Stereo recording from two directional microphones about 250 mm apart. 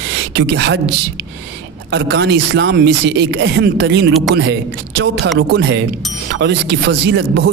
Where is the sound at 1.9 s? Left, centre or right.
Right.